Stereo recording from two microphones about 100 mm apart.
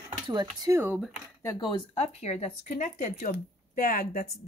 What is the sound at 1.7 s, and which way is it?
Speech, 90° left.